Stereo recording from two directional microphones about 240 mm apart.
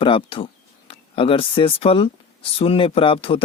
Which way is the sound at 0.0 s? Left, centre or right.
Left.